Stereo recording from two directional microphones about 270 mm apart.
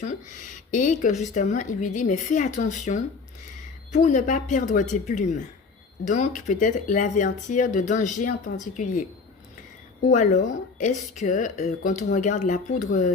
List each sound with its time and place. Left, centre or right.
0.7 s speech: left
10.1 s speech: left